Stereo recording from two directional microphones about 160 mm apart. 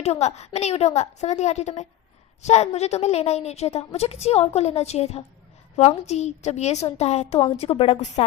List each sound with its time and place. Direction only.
0.0 s a woman's voice: 40° left (ahead or behind)